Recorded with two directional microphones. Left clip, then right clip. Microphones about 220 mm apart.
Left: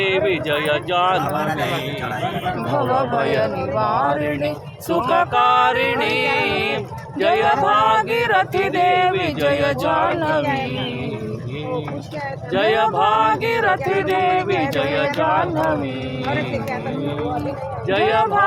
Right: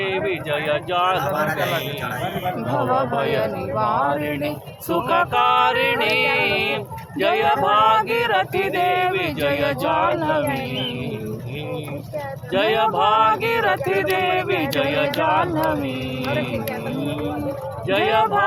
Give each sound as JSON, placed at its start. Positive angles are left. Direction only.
{"t": 0.0, "sound": "speech", "side_deg": 25}
{"t": 1.2, "sound": "a man's voice", "side_deg": -25}
{"t": 2.6, "sound": "mantra", "side_deg": 0}
{"t": 12.5, "sound": "mantra", "side_deg": 0}
{"t": 17.8, "sound": "mantra", "side_deg": 0}